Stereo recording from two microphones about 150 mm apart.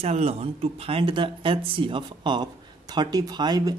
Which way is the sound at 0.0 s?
40° right (ahead or behind).